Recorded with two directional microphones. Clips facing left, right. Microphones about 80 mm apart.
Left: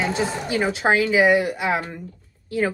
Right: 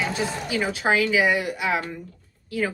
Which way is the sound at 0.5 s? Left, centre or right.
Left.